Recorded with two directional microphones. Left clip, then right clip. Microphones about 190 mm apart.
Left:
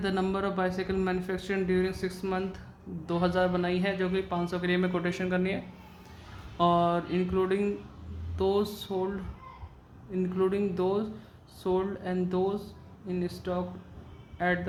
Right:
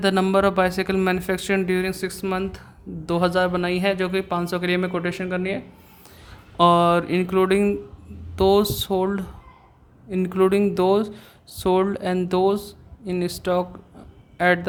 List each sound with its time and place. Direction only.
0.0 s speech: 45° right (ahead or behind)
6.6 s speech: 50° right (ahead or behind)